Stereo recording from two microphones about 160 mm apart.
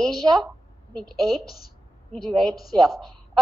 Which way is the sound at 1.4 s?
70° left (ahead or behind).